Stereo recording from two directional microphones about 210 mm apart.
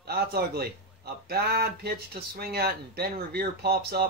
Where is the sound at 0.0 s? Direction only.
50° right (ahead or behind).